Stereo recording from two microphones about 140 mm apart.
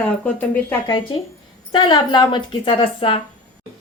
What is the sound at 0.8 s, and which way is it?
A woman's voice, 35° left (ahead or behind).